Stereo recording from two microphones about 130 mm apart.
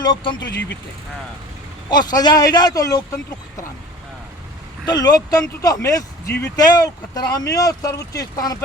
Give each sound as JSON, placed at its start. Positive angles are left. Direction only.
{"t": 0.0, "sound": "a man's voice", "side_deg": 35}
{"t": 1.9, "sound": "a man's voice", "side_deg": 30}
{"t": 4.9, "sound": "speech", "side_deg": 30}